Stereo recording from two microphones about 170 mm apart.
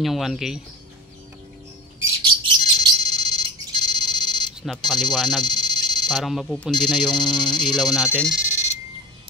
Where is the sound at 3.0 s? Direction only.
25° left (ahead or behind).